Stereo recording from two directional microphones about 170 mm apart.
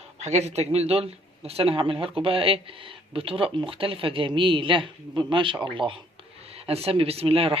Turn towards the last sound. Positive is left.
turn(degrees=-35)  # may be behind; listen again after turning